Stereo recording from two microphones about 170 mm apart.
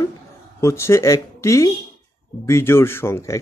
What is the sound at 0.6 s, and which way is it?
Speech, 15° left (ahead or behind).